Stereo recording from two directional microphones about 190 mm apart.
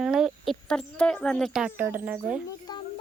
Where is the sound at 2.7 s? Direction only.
20° left (ahead or behind).